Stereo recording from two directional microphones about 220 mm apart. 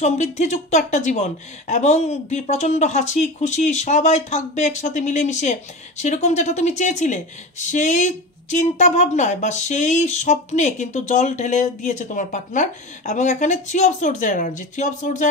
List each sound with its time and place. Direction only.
0.0 s a woman's voice: 30° left (ahead or behind)